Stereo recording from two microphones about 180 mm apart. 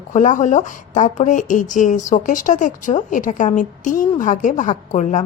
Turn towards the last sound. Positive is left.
turn(degrees=40)  # may be behind; listen again after turning